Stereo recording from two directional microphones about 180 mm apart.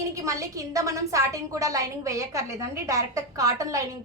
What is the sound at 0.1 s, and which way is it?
A woman's voice, 20° right (ahead or behind).